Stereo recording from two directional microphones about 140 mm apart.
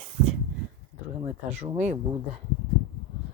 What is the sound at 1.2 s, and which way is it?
Speech, 55° right (ahead or behind).